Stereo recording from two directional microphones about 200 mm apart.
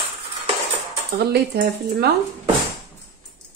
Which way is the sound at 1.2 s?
50° right (ahead or behind).